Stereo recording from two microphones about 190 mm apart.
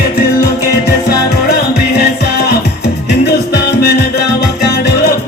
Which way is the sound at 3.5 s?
55° left (ahead or behind).